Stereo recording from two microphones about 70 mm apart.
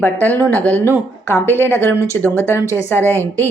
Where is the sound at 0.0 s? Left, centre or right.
Left.